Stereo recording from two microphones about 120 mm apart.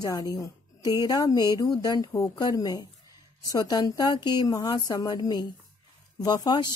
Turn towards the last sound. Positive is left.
turn(degrees=35)  # may be behind; listen again after turning